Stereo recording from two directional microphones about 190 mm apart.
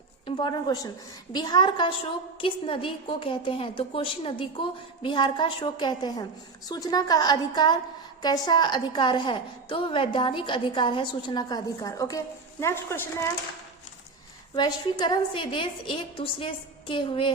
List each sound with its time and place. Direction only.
0.3 s a woman's voice: 25° left (ahead or behind)
14.5 s a woman's voice: 25° left (ahead or behind)